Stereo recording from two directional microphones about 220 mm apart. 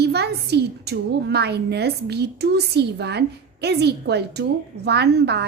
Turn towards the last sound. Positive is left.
turn(degrees=-50)  # may be behind; listen again after turning